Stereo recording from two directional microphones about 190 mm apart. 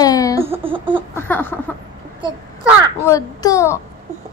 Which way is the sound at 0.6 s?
25° right (ahead or behind).